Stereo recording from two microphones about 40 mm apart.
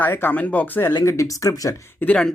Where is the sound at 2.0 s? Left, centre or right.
Left.